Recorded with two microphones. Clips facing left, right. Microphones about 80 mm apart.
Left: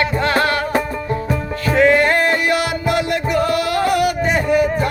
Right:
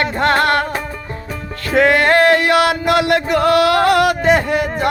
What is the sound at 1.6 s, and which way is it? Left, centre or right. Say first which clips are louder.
Music: right 1 dB; right.